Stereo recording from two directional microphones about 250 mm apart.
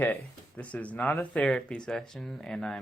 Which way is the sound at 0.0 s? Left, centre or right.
Centre.